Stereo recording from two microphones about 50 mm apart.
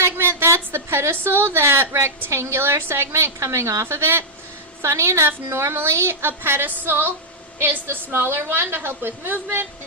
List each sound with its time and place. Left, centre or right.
0.0 s a sound: right
1.1 s a woman's voice: right
3.8 s a woman's voice: right
4.8 s a woman's voice: right